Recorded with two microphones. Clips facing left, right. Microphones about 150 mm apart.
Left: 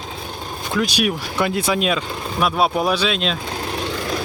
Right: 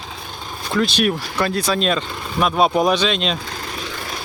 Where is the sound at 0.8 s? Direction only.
10° left (ahead or behind).